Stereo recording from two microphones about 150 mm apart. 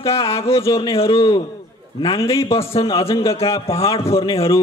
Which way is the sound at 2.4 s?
40° left (ahead or behind).